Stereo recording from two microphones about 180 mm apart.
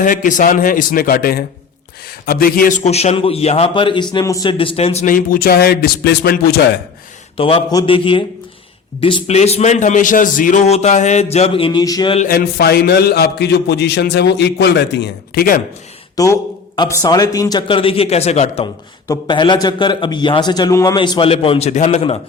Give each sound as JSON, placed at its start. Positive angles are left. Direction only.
{"t": 0.0, "sound": "a man's voice", "side_deg": 45}
{"t": 5.0, "sound": "a man's voice", "side_deg": 50}
{"t": 7.3, "sound": "a man's voice", "side_deg": 30}
{"t": 12.3, "sound": "a man's voice", "side_deg": 60}
{"t": 16.1, "sound": "a man's voice", "side_deg": 20}
{"t": 19.0, "sound": "a man's voice", "side_deg": 20}